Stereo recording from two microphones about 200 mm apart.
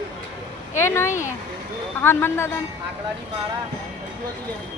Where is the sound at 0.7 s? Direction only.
10° left (ahead or behind).